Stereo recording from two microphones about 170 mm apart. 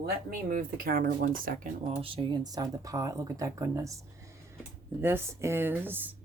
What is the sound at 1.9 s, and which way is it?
Speech, 30° right (ahead or behind).